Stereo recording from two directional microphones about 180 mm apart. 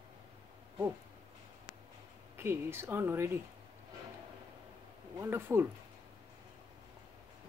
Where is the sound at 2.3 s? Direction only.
15° right (ahead or behind).